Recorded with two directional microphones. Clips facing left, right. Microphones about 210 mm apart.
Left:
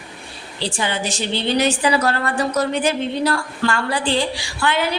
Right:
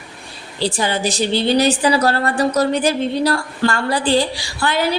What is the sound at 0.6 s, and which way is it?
A woman's voice, 40° right (ahead or behind).